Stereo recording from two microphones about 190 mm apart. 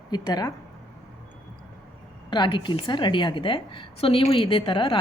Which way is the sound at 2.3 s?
25° left (ahead or behind).